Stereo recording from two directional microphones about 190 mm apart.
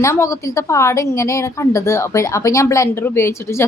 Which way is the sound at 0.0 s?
15° left (ahead or behind).